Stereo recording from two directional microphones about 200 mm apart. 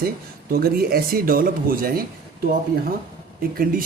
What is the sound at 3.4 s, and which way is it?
Speech, 45° right (ahead or behind).